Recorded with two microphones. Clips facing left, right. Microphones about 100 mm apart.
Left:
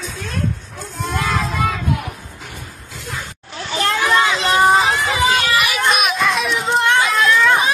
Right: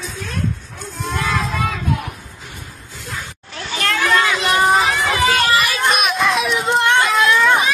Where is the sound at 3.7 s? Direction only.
25° left (ahead or behind).